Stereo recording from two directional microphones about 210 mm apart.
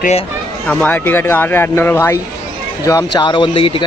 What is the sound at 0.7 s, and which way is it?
Speech, 5° left (ahead or behind).